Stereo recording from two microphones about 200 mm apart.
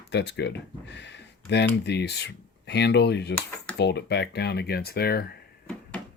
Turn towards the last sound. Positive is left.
turn(degrees=50)  # may be behind; listen again after turning